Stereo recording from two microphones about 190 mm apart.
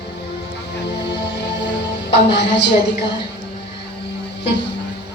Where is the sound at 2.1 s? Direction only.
65° left (ahead or behind).